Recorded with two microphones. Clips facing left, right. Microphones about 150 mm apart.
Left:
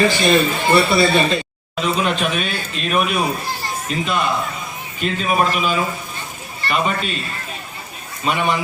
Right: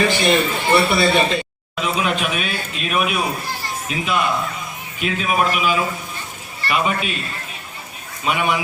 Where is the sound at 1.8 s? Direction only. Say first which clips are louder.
Left 1 dB; 5° right (ahead or behind).